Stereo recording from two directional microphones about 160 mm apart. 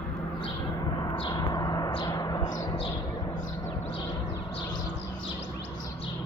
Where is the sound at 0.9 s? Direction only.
30° left (ahead or behind).